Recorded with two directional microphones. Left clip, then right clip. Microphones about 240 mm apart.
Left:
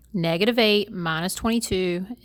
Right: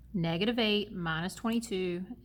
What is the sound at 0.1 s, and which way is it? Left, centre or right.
Speech, left.